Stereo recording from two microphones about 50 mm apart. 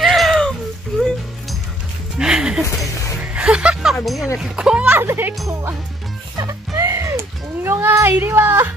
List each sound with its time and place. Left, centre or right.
0.0 s a sound: centre
0.9 s music: centre
2.1 s music: centre
2.6 s music: left
3.3 s a sound: centre
3.9 s speech: centre
4.4 s a child's voice: centre
4.9 s speech: right
5.5 s speech: right
6.8 s a sound: right
8.1 s speech: right